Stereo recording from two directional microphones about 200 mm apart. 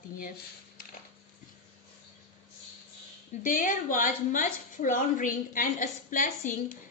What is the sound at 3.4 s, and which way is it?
A woman's voice, 45° left (ahead or behind).